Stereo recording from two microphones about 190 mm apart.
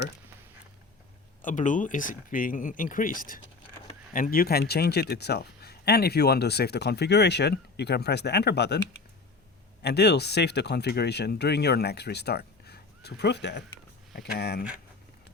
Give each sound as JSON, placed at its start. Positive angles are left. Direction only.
{"t": 1.4, "sound": "a man's voice", "side_deg": 45}
{"t": 9.8, "sound": "a man's voice", "side_deg": 60}